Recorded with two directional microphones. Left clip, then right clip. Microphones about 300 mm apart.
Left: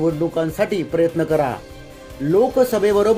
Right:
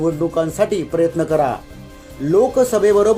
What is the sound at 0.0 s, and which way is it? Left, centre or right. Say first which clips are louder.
Speech: right 1 dB; centre.